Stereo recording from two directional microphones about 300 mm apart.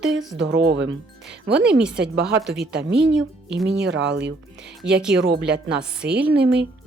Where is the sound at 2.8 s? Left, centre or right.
Right.